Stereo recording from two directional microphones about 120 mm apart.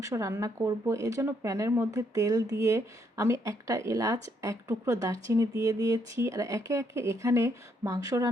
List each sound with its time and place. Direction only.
0.0 s speech: 25° right (ahead or behind)